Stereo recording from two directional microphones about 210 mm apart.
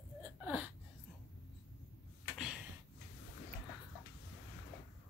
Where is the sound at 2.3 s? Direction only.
5° right (ahead or behind).